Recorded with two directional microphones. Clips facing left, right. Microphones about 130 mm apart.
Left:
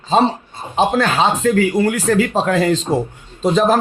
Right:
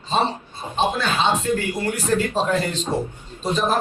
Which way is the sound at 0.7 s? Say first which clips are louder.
Left 6 dB; 90° left.